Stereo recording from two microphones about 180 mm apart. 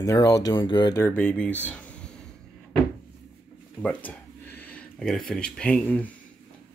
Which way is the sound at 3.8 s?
10° left (ahead or behind).